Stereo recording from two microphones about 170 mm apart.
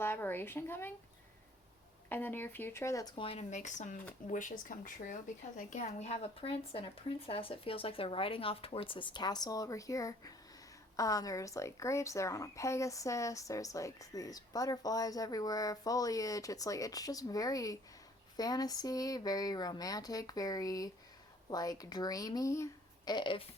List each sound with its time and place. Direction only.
0.0 s a woman's voice: 10° left (ahead or behind)
2.0 s speech: 10° left (ahead or behind)
3.2 s speech: 35° left (ahead or behind)